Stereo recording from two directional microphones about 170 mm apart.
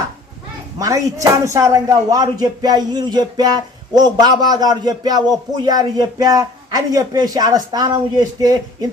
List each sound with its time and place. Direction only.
0.8 s speech: 20° right (ahead or behind)